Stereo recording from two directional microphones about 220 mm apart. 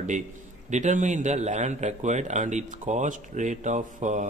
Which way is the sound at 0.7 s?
35° right (ahead or behind).